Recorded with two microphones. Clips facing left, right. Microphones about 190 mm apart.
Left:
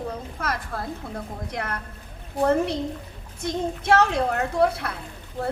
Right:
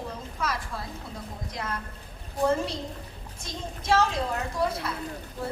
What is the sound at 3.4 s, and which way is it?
A woman's voice, 65° left (ahead or behind).